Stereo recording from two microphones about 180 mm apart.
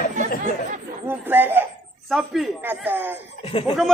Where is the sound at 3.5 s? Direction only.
30° left (ahead or behind).